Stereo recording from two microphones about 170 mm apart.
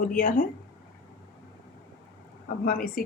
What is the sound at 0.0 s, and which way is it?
Speech, 50° left (ahead or behind).